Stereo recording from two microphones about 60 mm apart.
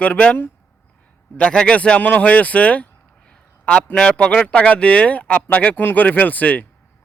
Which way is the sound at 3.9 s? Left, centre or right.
Centre.